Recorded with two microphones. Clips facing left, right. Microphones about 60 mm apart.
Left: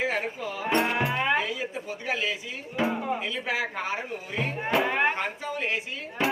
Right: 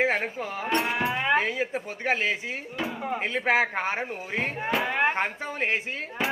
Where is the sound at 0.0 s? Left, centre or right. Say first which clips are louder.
Right 3 dB; right.